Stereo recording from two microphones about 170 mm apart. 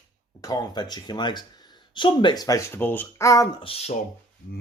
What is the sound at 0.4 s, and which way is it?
Speech, 25° left (ahead or behind).